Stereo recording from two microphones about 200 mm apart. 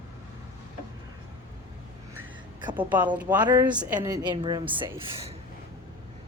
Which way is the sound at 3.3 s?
20° right (ahead or behind).